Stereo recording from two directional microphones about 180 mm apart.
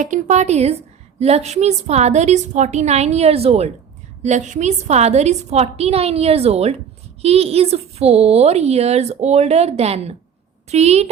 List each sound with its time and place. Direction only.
0.0 s a woman's voice: 45° right (ahead or behind)